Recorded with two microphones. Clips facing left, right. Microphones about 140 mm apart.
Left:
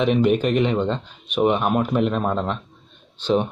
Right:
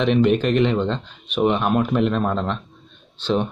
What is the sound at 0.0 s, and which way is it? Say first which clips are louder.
Speech: right 1 dB; 5° left (ahead or behind).